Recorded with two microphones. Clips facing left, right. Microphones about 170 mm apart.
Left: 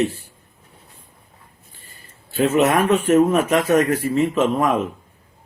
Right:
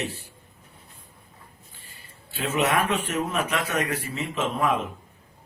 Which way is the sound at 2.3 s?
45° left (ahead or behind).